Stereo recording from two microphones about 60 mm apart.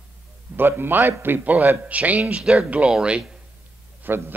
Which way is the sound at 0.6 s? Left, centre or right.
Right.